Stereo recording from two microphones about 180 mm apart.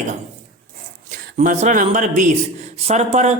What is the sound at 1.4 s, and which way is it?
A man's voice, 45° right (ahead or behind).